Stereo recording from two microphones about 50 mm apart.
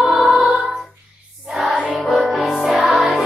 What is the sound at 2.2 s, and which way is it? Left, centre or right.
Music, centre.